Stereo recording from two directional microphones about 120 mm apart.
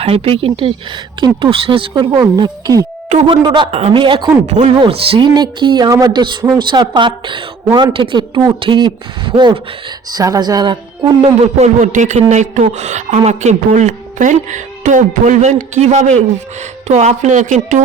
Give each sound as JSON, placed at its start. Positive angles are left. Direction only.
{"t": 0.0, "sound": "speech", "side_deg": -50}
{"t": 3.7, "sound": "speech", "side_deg": -55}
{"t": 4.4, "sound": "a woman's voice", "side_deg": -80}
{"t": 4.9, "sound": "speech", "side_deg": -50}
{"t": 5.3, "sound": "speech", "side_deg": -40}
{"t": 10.2, "sound": "speech", "side_deg": -30}
{"t": 11.2, "sound": "a woman's voice", "side_deg": -65}